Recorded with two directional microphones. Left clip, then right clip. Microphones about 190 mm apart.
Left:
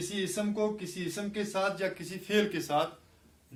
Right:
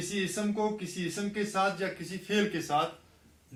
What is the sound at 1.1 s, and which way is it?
Speech, 40° left (ahead or behind).